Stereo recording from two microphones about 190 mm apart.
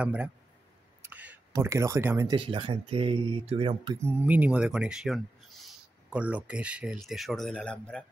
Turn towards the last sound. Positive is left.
turn(degrees=5)  # may be behind; listen again after turning